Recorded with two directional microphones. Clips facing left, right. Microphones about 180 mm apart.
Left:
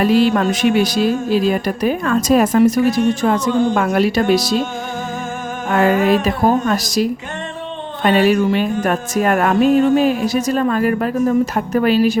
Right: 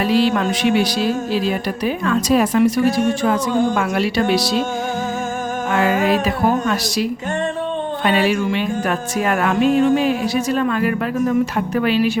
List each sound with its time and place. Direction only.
0.0 s speech: 45° left (ahead or behind)
5.7 s speech: 45° left (ahead or behind)